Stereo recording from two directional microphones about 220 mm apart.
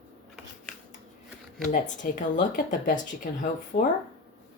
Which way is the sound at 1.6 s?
35° left (ahead or behind).